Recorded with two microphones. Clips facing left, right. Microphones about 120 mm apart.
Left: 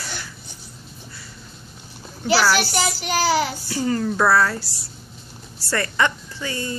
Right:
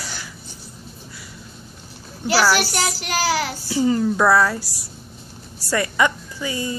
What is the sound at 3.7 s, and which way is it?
A woman's voice, 15° right (ahead or behind).